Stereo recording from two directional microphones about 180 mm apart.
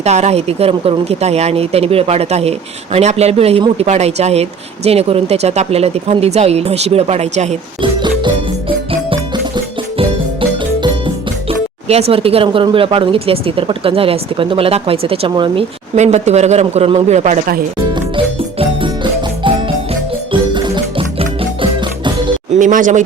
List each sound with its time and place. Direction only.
0.0 s speech: 40° right (ahead or behind)
8.9 s music: 30° right (ahead or behind)
10.8 s speech: 30° right (ahead or behind)
17.9 s music: 30° right (ahead or behind)
22.5 s speech: 45° right (ahead or behind)